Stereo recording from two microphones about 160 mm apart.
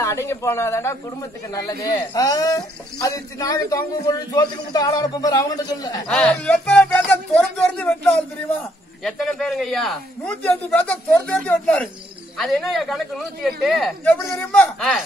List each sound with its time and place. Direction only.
0.0 s a man's voice: 15° left (ahead or behind)
6.0 s a man's voice: 5° left (ahead or behind)